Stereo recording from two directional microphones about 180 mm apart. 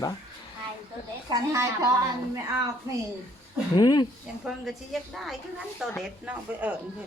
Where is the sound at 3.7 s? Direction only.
25° left (ahead or behind).